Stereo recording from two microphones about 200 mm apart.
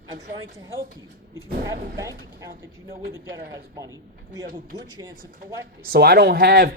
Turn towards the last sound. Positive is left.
turn(degrees=-55)  # may be behind; listen again after turning